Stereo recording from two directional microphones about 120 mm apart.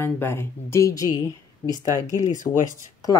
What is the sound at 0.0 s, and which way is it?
Speech, 20° left (ahead or behind).